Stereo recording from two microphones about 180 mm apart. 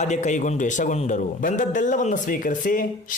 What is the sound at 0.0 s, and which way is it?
A man's voice, 40° left (ahead or behind).